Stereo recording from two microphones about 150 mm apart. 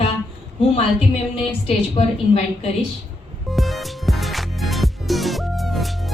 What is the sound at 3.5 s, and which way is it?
Music, centre (ahead or behind).